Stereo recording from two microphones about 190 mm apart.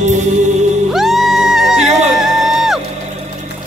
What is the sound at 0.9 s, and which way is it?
Music, centre (ahead or behind).